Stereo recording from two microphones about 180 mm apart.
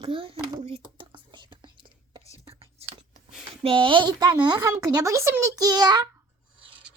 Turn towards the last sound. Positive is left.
turn(degrees=-20)  # may be behind; listen again after turning